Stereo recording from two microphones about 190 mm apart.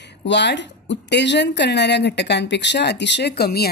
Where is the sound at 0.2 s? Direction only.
65° left (ahead or behind).